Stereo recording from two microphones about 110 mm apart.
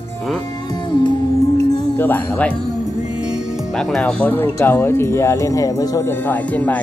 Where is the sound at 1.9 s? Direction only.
20° left (ahead or behind).